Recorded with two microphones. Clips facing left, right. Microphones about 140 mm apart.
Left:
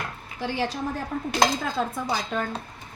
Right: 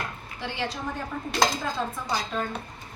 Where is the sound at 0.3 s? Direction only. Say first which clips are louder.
Left 5 dB; 35° left (ahead or behind).